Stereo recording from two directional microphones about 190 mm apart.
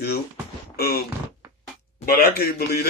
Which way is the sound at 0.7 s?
55° left (ahead or behind).